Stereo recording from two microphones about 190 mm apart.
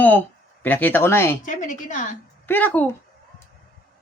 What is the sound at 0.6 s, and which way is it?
Speech, 10° left (ahead or behind).